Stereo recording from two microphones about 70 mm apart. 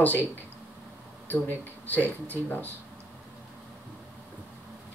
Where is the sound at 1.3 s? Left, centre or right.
Left.